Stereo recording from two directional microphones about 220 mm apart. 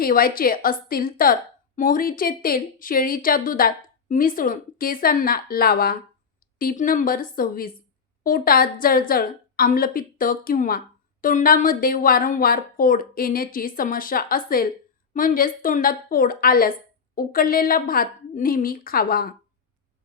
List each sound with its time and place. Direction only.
0.0 s a woman's voice: 40° left (ahead or behind)